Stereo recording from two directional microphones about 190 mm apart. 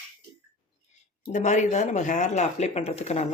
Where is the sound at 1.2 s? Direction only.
40° left (ahead or behind).